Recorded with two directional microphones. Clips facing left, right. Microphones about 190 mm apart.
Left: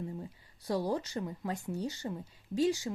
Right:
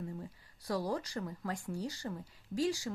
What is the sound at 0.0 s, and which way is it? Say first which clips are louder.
Speech: left 2 dB; 20° left (ahead or behind).